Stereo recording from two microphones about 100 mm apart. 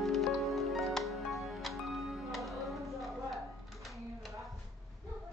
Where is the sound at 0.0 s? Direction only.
Centre (ahead or behind).